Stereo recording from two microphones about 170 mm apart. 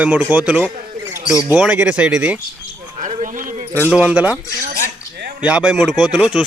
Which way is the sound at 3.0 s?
50° right (ahead or behind).